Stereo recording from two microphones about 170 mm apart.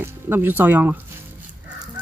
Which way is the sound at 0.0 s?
10° right (ahead or behind).